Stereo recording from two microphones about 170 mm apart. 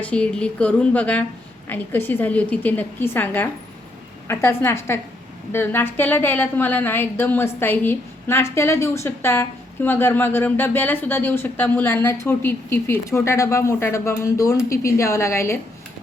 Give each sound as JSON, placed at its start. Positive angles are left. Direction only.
{"t": 0.0, "sound": "a woman's voice", "side_deg": 5}